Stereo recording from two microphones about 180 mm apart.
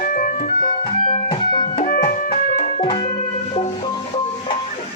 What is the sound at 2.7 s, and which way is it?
Music, 25° left (ahead or behind).